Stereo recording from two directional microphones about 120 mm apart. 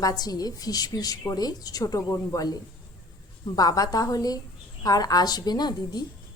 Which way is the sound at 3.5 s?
30° left (ahead or behind).